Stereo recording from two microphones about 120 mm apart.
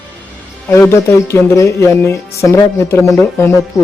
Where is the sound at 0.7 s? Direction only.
20° left (ahead or behind).